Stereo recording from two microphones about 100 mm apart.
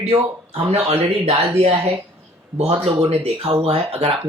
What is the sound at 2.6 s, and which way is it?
Speech, 90° right.